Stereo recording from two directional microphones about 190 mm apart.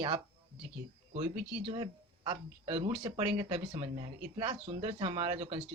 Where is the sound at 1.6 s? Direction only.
25° right (ahead or behind).